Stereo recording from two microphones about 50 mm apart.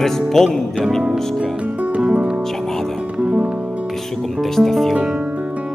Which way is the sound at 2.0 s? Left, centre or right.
Right.